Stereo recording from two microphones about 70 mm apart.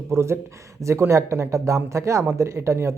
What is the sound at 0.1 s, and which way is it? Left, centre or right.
A man's voice, right.